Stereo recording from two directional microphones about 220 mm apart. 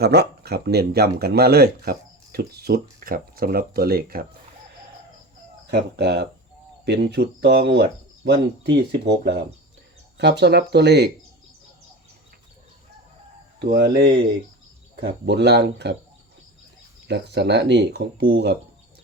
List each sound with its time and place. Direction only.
0.0 s speech: 45° right (ahead or behind)
5.7 s speech: 50° right (ahead or behind)
13.6 s speech: 50° right (ahead or behind)
17.1 s speech: 50° right (ahead or behind)